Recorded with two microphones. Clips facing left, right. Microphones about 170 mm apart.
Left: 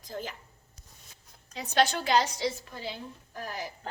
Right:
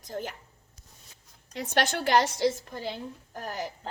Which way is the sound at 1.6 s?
65° right (ahead or behind).